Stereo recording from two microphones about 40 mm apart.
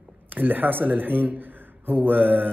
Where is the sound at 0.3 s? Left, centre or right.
Right.